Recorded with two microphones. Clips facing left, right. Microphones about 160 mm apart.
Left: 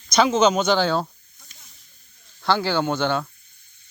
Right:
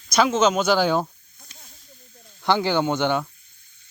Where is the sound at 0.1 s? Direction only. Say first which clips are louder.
Left 1 dB; centre (ahead or behind).